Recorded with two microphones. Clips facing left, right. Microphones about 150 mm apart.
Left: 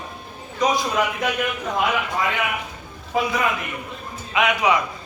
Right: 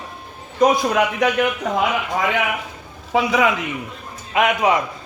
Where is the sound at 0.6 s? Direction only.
60° right (ahead or behind).